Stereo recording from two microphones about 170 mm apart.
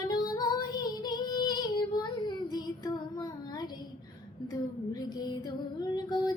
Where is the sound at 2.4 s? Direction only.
25° left (ahead or behind).